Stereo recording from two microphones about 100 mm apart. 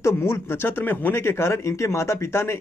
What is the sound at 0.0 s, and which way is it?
Speech, 25° left (ahead or behind).